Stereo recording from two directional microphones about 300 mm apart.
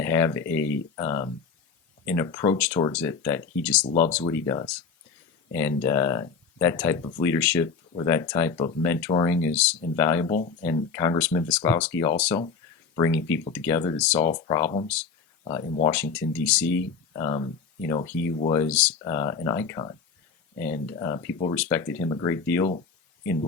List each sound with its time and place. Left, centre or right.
0.0 s speech: centre
3.8 s speech: left
4.3 s speech: centre
15.9 s speech: centre